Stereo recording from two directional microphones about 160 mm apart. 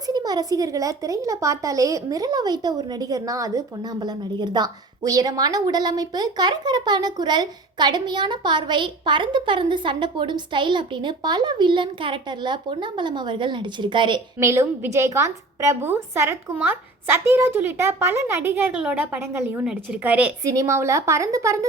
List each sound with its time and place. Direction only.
0.1 s a woman's voice: 25° right (ahead or behind)
14.3 s a woman's voice: 15° right (ahead or behind)
20.5 s a woman's voice: 20° right (ahead or behind)